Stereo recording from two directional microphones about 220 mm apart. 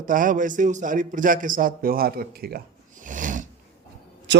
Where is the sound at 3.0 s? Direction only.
35° right (ahead or behind).